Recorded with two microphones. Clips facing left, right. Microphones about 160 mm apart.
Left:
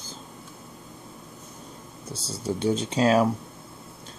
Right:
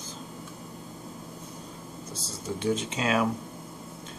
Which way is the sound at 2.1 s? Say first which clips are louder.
Left 6 dB; 35° left (ahead or behind).